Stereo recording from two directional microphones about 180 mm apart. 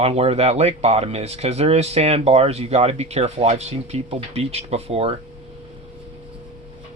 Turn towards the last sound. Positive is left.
turn(degrees=-35)  # may be behind; listen again after turning